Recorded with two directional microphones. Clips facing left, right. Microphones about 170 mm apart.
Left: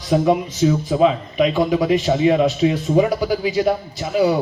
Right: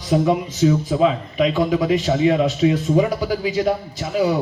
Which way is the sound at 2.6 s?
25° left (ahead or behind).